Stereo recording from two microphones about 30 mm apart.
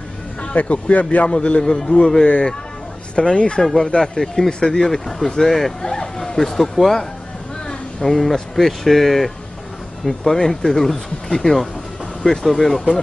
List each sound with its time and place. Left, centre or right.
0.4 s speech: left
1.3 s speech: left
1.6 s a man's voice: left
3.2 s speech: left
3.7 s a man's voice: left
5.8 s a man's voice: left
6.1 s speech: centre